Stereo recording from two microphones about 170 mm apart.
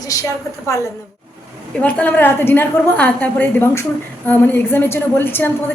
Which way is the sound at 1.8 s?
10° left (ahead or behind).